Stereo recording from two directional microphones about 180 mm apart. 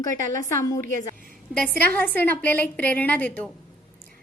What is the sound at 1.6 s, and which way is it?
A woman's voice, 10° left (ahead or behind).